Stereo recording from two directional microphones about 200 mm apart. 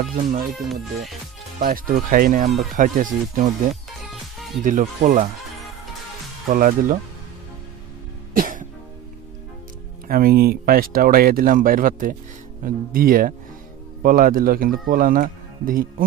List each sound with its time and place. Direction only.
0.0 s speech: 40° right (ahead or behind)
1.6 s speech: 45° right (ahead or behind)
4.6 s speech: 40° right (ahead or behind)
6.5 s speech: 40° right (ahead or behind)
8.4 s music: 45° right (ahead or behind)
10.0 s speech: 45° right (ahead or behind)